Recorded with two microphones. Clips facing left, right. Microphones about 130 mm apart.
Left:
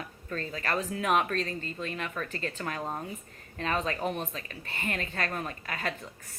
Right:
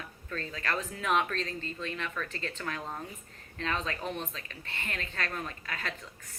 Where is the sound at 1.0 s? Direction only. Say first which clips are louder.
Left 2 dB; 45° left (ahead or behind).